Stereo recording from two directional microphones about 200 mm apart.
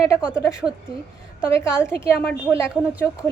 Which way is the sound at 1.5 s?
15° left (ahead or behind).